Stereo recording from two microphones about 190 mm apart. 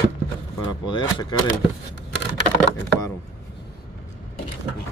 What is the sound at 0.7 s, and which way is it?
Speech, 20° left (ahead or behind).